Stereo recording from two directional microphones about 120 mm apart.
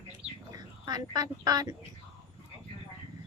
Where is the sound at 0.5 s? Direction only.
30° right (ahead or behind).